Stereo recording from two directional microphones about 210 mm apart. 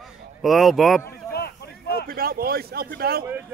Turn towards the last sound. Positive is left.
turn(degrees=-45)  # may be behind; listen again after turning